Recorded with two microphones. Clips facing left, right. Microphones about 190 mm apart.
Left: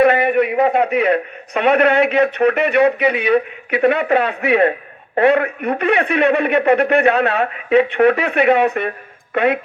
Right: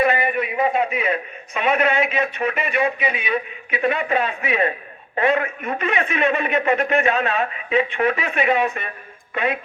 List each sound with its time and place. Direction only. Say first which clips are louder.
0.0 s a man's voice: left 7 dB; 65° left (ahead or behind)